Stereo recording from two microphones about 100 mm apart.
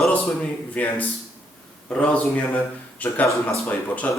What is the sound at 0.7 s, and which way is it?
Speech, 15° left (ahead or behind).